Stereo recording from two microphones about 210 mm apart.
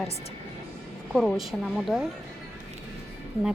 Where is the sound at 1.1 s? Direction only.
Centre (ahead or behind).